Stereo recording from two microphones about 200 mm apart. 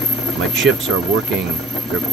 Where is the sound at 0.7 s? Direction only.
80° right.